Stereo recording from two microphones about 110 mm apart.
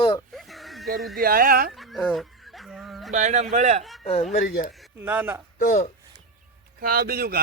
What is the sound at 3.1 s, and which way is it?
Speech, 90° right.